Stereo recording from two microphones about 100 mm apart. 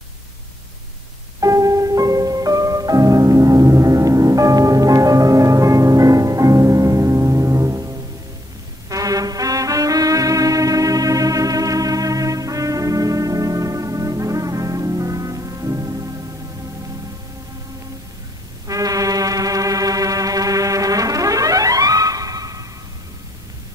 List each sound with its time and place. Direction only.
1.4 s music: 35° right (ahead or behind)
18.7 s music: 35° right (ahead or behind)